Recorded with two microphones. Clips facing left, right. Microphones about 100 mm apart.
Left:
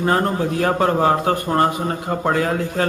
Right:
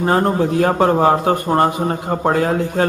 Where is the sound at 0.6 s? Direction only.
25° right (ahead or behind).